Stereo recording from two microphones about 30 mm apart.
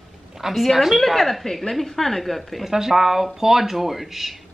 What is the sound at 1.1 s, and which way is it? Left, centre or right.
Speech, centre.